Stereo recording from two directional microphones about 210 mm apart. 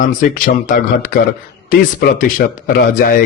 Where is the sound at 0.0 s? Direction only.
40° left (ahead or behind).